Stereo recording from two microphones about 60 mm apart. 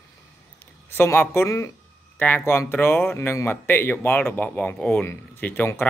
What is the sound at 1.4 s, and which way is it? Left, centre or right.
Speech, left.